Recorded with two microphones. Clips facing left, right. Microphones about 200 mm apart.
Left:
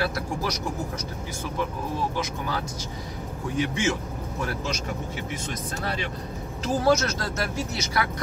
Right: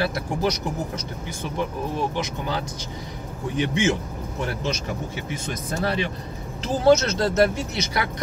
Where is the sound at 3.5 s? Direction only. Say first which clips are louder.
Right 3 dB; 20° right (ahead or behind).